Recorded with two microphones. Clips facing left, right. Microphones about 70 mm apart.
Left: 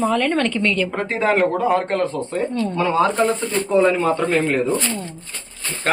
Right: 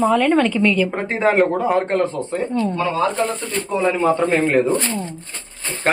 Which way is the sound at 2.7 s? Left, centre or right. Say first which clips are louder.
Left 2 dB; centre.